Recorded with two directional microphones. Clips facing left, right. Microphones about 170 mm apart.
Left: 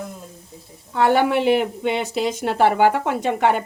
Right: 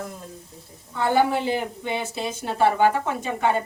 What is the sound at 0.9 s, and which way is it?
A woman's voice, 70° left (ahead or behind).